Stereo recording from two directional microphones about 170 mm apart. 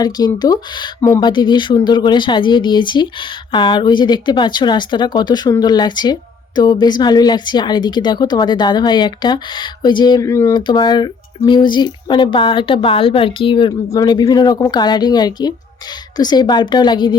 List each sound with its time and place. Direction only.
0.0 s a woman's voice: 25° left (ahead or behind)